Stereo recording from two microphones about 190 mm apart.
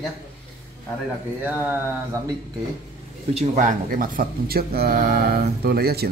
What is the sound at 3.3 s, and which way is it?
Speech, 40° right (ahead or behind).